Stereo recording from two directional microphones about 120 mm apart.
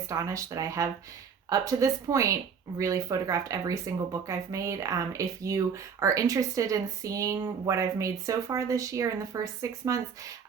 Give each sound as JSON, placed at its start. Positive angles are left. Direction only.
{"t": 0.1, "sound": "speech", "side_deg": -25}